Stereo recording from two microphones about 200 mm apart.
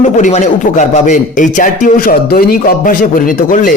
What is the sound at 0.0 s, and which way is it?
Speech, 35° left (ahead or behind).